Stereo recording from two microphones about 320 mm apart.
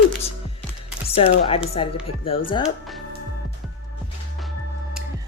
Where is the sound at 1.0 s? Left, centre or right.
Centre.